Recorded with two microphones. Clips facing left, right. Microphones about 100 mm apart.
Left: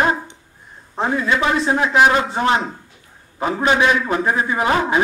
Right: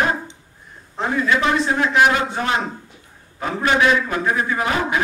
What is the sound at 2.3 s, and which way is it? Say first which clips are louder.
Speech: left 4 dB; 30° left (ahead or behind).